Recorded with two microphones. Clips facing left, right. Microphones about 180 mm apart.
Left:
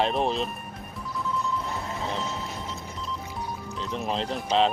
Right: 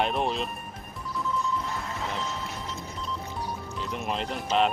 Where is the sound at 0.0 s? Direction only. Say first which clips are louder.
Left 2 dB; centre (ahead or behind).